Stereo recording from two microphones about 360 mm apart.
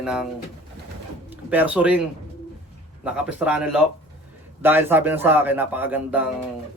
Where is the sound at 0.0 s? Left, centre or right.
Centre.